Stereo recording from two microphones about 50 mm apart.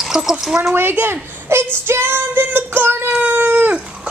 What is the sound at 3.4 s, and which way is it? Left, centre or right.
Dog, right.